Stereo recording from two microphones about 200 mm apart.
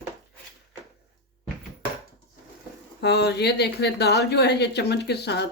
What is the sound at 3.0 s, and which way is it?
Speech, 55° left (ahead or behind).